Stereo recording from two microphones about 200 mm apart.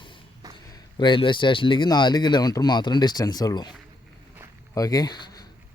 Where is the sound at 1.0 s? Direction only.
25° left (ahead or behind).